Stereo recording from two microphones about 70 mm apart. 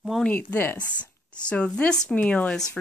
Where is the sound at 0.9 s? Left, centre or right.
Centre.